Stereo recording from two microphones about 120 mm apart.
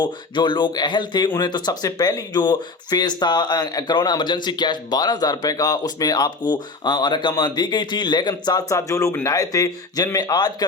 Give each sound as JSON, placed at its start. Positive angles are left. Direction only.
{"t": 0.0, "sound": "speech", "side_deg": 40}